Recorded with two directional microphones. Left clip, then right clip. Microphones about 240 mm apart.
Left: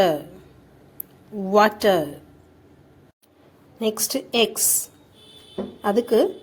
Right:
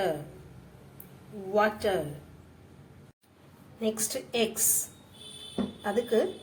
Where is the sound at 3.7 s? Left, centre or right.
Left.